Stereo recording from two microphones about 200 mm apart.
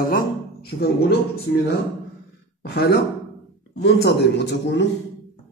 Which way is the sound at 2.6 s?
55° left (ahead or behind).